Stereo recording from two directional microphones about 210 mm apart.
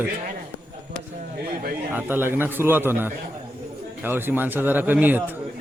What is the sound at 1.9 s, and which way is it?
A man's voice, 10° right (ahead or behind).